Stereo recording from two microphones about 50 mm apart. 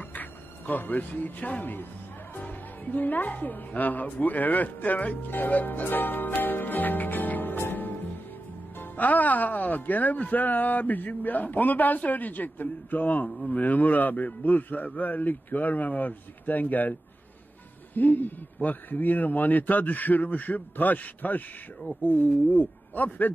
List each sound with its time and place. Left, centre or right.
0.0 s a woman's voice: left
17.9 s speech: left